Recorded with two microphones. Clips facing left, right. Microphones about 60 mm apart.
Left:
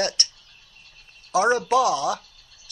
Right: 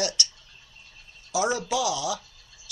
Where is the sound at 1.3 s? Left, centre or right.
Left.